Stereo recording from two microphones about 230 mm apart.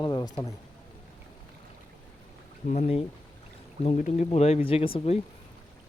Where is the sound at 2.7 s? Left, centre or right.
Left.